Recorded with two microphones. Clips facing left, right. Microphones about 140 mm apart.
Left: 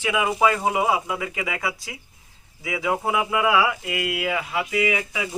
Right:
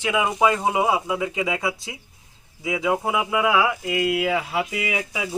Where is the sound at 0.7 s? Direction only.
10° right (ahead or behind).